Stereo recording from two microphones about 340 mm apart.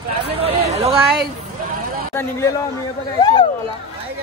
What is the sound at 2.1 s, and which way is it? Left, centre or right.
Speech, centre.